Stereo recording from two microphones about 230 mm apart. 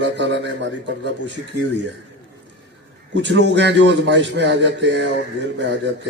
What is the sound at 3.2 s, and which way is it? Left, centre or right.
A man's voice, right.